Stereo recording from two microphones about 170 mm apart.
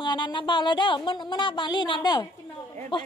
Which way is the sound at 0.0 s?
25° left (ahead or behind).